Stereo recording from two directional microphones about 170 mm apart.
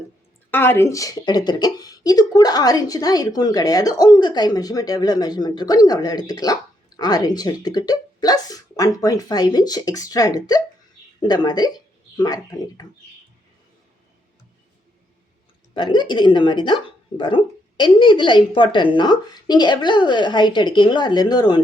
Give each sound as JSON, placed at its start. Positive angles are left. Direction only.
{"t": 0.5, "sound": "a woman's voice", "side_deg": 10}
{"t": 15.7, "sound": "a woman's voice", "side_deg": 25}